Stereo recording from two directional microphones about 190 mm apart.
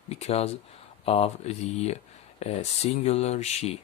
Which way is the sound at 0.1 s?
35° left (ahead or behind).